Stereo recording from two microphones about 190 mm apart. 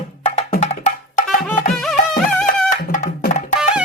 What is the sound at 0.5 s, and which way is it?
Music, 35° left (ahead or behind).